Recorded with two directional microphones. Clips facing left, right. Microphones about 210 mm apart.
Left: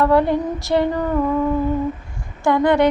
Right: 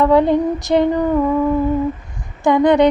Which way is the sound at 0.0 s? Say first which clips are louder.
Right 3 dB; 20° right (ahead or behind).